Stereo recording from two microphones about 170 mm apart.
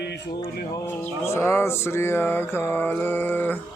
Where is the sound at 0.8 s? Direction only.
15° left (ahead or behind).